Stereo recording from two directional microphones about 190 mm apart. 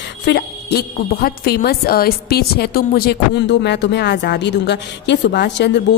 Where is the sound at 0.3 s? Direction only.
60° left (ahead or behind).